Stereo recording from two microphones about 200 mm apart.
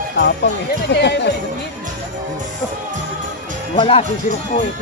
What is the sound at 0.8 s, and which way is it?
Speech, 60° left (ahead or behind).